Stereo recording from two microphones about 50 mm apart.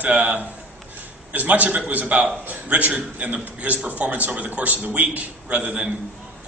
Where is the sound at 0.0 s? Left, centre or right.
Right.